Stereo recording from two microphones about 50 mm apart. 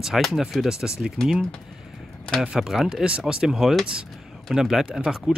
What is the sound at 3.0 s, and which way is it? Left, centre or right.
Speech, right.